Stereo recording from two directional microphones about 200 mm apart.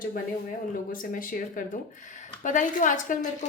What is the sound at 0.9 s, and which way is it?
A woman's voice, 45° left (ahead or behind).